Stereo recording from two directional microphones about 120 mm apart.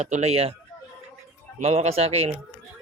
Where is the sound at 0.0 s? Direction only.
65° right (ahead or behind).